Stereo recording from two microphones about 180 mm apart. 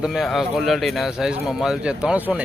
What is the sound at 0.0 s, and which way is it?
Speech, centre (ahead or behind).